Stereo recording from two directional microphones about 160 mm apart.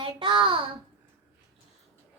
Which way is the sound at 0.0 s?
30° right (ahead or behind).